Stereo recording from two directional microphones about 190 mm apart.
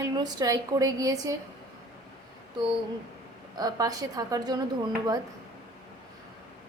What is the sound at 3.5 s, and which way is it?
A woman's voice, 20° right (ahead or behind).